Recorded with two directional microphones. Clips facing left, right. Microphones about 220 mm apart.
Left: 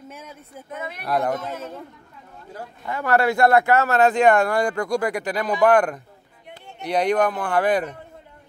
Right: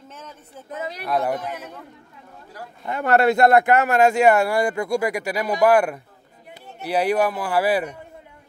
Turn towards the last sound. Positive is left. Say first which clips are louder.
# even
turn(degrees=-10)  # may be behind; listen again after turning